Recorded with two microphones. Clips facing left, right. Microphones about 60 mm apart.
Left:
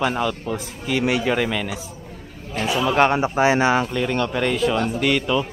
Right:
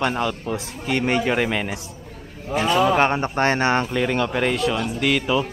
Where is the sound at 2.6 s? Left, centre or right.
Right.